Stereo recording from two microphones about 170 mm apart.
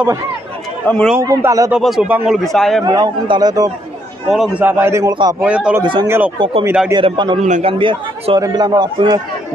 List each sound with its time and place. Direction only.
0.8 s speech: 5° left (ahead or behind)
1.2 s a man's voice: 20° right (ahead or behind)
1.7 s speech: centre (ahead or behind)
2.8 s a man's voice: 25° right (ahead or behind)
4.3 s a man's voice: 5° right (ahead or behind)
6.3 s a man's voice: 30° right (ahead or behind)
6.6 s a man's voice: 10° right (ahead or behind)
6.9 s a man's voice: 30° right (ahead or behind)
7.4 s a man's voice: 45° right (ahead or behind)
7.8 s a man's voice: 30° right (ahead or behind)